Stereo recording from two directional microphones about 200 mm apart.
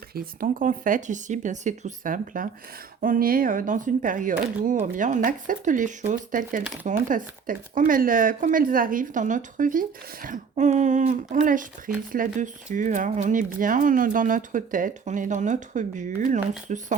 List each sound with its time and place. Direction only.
0.1 s speech: 45° right (ahead or behind)